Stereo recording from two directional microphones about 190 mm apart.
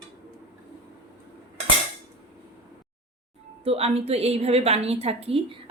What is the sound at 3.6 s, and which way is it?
Speech, 30° right (ahead or behind).